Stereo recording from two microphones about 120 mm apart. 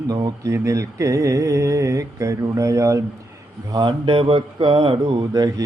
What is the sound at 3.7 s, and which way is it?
Speech, 40° right (ahead or behind).